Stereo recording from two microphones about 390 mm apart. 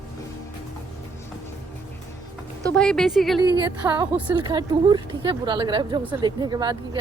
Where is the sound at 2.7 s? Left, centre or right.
Centre.